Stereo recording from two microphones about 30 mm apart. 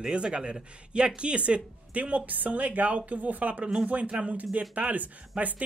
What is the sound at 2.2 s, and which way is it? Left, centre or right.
A woman's voice, right.